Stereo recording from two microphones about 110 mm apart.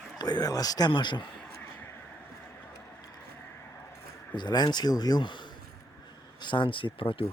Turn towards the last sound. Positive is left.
turn(degrees=55)  # may be behind; listen again after turning